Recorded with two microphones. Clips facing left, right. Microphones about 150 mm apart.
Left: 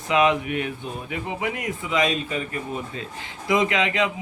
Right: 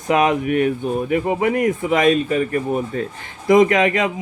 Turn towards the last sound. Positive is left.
turn(degrees=-45)  # may be behind; listen again after turning